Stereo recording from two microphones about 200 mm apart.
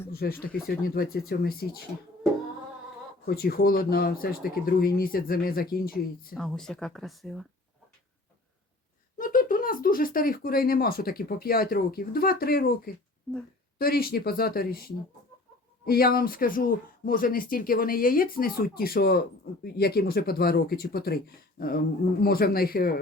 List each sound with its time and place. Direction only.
0.1 s speech: 50° left (ahead or behind)
3.2 s speech: 50° left (ahead or behind)
6.3 s speech: centre (ahead or behind)
9.1 s speech: 45° left (ahead or behind)
15.9 s speech: 50° left (ahead or behind)